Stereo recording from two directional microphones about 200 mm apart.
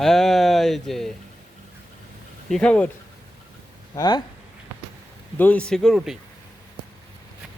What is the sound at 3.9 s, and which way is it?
Speech, 20° left (ahead or behind).